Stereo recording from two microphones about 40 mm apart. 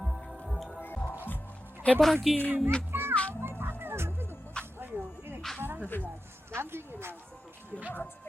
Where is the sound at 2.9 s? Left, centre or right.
Right.